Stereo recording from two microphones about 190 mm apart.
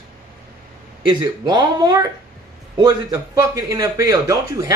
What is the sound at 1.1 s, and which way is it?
Speech, 20° right (ahead or behind).